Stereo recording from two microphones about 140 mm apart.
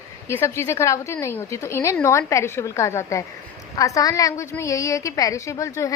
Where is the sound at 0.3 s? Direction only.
20° left (ahead or behind).